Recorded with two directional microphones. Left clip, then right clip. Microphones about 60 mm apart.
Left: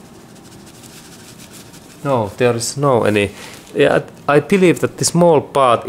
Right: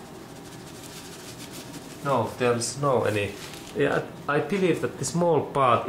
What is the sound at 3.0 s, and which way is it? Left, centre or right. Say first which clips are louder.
Speech: left 10 dB; left.